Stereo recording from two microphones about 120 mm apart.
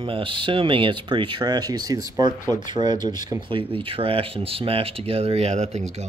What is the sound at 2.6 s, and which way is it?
Speech, 40° right (ahead or behind).